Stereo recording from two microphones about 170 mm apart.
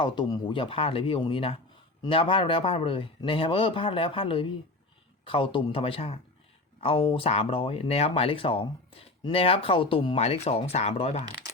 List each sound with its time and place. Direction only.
0.0 s speech: 25° left (ahead or behind)